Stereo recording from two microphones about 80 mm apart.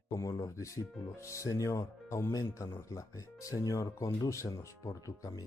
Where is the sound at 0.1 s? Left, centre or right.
Left.